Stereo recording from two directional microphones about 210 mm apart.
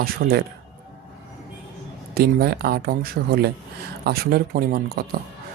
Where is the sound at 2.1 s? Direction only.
50° right (ahead or behind).